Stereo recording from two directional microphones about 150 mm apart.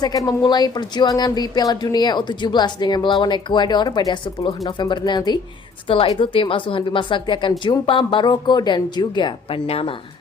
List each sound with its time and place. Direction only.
0.0 s a woman's voice: 25° left (ahead or behind)